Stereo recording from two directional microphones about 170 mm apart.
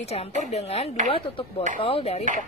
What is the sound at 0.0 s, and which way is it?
Speech, 40° left (ahead or behind).